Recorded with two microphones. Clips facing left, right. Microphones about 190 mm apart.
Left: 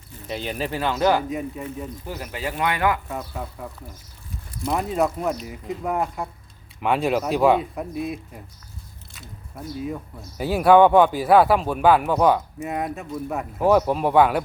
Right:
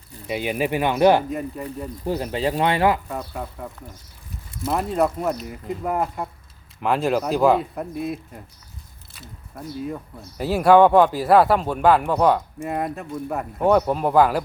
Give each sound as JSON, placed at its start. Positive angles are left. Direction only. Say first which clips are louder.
{"t": 0.3, "sound": "speech", "louder": "right 4 dB", "side_deg": -10}
{"t": 1.3, "sound": "speech", "louder": "right 1 dB", "side_deg": 0}
{"t": 2.0, "sound": "speech", "louder": "right 10 dB", "side_deg": -30}
{"t": 4.6, "sound": "speech", "louder": "right 1 dB", "side_deg": 0}